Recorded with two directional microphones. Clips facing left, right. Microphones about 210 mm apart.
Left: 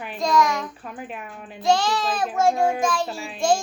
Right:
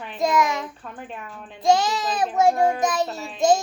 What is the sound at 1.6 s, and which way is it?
A child's voice, 20° right (ahead or behind).